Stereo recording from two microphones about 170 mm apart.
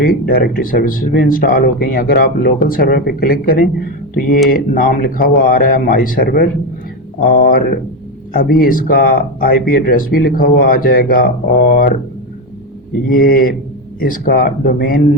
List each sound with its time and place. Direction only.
0.0 s speech: 60° left (ahead or behind)
13.1 s speech: 60° left (ahead or behind)